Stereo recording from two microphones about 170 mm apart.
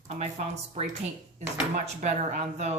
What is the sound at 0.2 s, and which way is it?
Speech, 40° right (ahead or behind).